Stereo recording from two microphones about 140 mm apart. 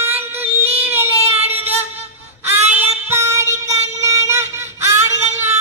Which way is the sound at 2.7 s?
15° right (ahead or behind).